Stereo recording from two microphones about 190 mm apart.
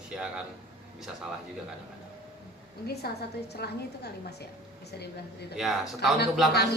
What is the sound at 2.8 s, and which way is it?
A woman's voice, 55° left (ahead or behind).